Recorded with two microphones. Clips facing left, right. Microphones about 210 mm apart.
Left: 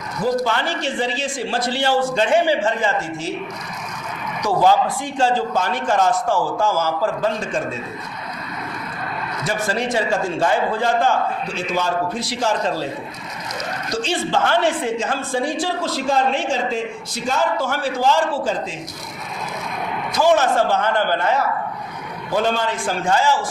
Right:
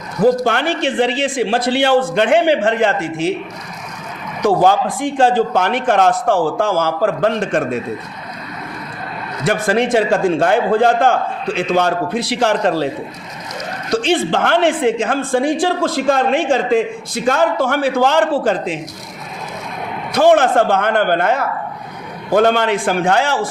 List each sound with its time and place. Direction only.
0.2 s a man's voice: 55° right (ahead or behind)
4.4 s a man's voice: 50° right (ahead or behind)
9.5 s a man's voice: 60° right (ahead or behind)
13.9 s a man's voice: 60° right (ahead or behind)
20.1 s a man's voice: 55° right (ahead or behind)